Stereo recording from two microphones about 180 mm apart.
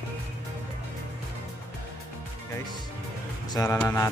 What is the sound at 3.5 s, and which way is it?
Speech, 20° left (ahead or behind).